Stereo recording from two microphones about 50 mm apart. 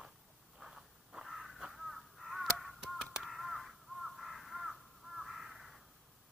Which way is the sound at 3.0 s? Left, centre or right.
Centre.